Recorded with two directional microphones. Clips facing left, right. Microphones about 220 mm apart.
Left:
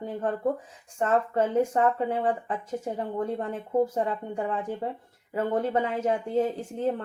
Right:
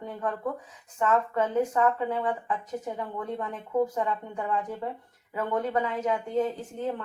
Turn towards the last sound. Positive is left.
turn(degrees=30)  # may be behind; listen again after turning